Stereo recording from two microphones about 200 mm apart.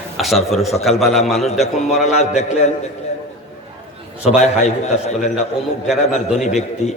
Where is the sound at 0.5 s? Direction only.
Centre (ahead or behind).